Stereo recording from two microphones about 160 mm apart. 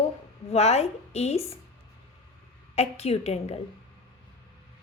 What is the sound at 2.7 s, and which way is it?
Speech, 40° left (ahead or behind).